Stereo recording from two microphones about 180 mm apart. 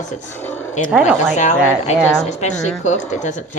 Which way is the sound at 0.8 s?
5° right (ahead or behind).